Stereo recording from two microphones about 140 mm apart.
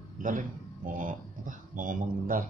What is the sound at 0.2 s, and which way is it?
Speech, 70° right (ahead or behind).